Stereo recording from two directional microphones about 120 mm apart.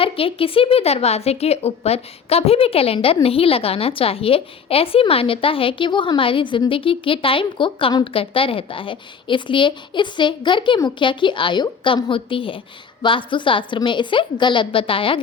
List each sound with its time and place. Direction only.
0.0 s a woman's voice: 50° left (ahead or behind)